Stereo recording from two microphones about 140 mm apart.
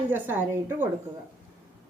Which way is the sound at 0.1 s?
15° right (ahead or behind).